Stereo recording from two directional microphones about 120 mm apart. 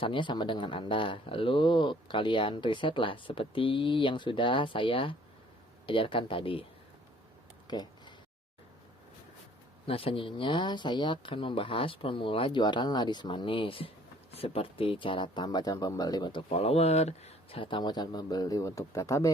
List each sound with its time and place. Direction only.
0.0 s speech: 40° left (ahead or behind)
7.7 s a sound: 35° left (ahead or behind)
9.8 s speech: 50° left (ahead or behind); by 16.4 s 35° left (ahead or behind)
16.5 s speech: 55° left (ahead or behind); by 19.3 s 25° left (ahead or behind)